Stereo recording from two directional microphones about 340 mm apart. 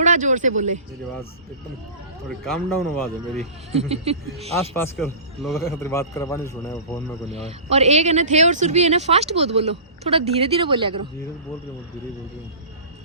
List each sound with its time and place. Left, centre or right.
0.0 s speech: right
2.4 s speech: centre
3.7 s speech: centre
4.8 s a man's voice: centre
7.4 s speech: centre